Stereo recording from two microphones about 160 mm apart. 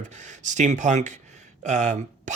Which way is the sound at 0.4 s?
50° right (ahead or behind).